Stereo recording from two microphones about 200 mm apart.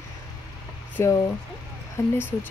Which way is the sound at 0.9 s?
15° left (ahead or behind).